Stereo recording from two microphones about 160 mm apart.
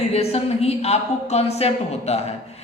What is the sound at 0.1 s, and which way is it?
A woman's voice, 40° left (ahead or behind).